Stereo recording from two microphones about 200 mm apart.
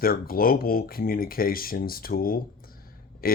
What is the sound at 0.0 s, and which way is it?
Speech, 50° left (ahead or behind).